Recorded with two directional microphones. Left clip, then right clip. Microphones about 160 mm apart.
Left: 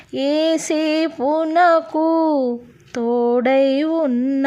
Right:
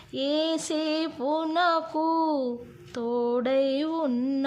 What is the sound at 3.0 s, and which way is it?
Female singing, 30° left (ahead or behind).